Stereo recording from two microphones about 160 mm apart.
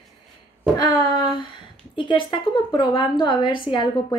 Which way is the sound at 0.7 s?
30° left (ahead or behind).